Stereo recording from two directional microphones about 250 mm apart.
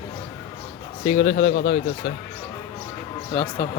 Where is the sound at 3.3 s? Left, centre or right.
Centre.